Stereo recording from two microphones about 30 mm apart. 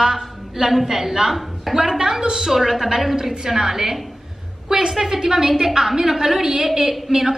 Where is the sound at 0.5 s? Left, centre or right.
Centre.